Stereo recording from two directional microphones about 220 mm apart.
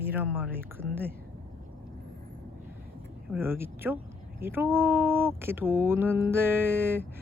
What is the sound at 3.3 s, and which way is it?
Speech, 10° right (ahead or behind).